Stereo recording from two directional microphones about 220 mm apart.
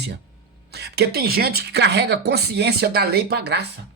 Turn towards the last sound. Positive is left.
turn(degrees=-50)  # may be behind; listen again after turning